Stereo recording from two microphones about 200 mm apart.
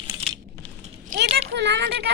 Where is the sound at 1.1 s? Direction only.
45° right (ahead or behind).